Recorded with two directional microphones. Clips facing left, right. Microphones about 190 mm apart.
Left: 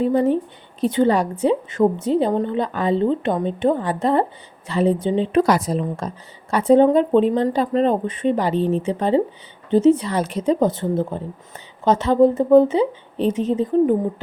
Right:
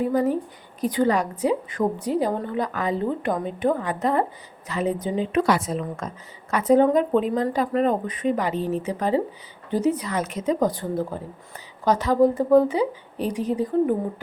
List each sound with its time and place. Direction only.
0.0 s a woman's voice: 25° left (ahead or behind)